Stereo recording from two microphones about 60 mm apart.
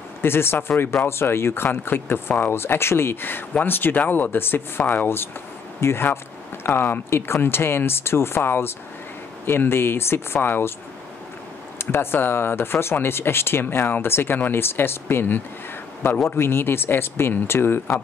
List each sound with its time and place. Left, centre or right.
0.2 s speech: left
11.8 s speech: left